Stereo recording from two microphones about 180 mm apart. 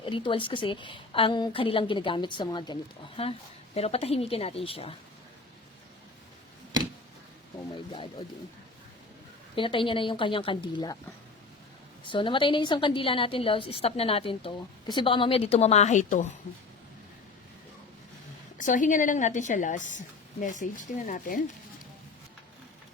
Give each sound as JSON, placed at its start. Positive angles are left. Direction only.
{"t": 0.0, "sound": "a woman's voice", "side_deg": 30}
{"t": 9.6, "sound": "a woman's voice", "side_deg": 30}
{"t": 12.0, "sound": "a woman's voice", "side_deg": 25}
{"t": 18.5, "sound": "a woman's voice", "side_deg": 45}